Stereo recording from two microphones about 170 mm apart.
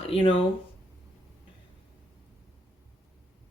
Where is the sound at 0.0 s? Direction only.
35° left (ahead or behind).